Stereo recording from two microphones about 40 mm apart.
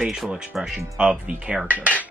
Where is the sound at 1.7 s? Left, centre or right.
Right.